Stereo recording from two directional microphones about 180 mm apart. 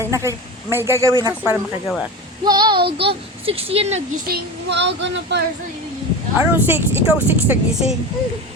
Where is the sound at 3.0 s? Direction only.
30° right (ahead or behind).